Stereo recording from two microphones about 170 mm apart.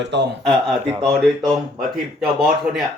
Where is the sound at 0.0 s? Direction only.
90° right.